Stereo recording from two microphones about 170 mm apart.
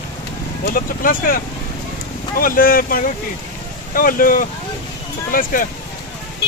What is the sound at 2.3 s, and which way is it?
Speech, 55° left (ahead or behind).